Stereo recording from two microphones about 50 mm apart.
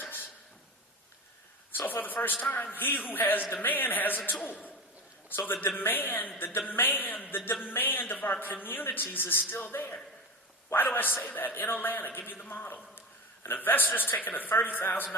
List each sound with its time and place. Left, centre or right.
1.7 s a sound: left
2.7 s a man's voice: left
5.5 s a man's voice: left